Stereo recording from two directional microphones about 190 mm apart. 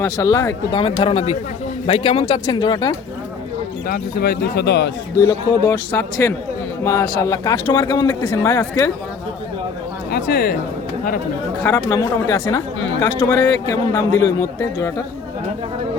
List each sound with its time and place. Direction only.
0.0 s speech: 15° left (ahead or behind)
0.8 s speech: 30° left (ahead or behind)
3.8 s speech: 55° left (ahead or behind)
5.2 s speech: 15° left (ahead or behind)
10.1 s speech: 55° left (ahead or behind)
11.9 s speech: 15° left (ahead or behind)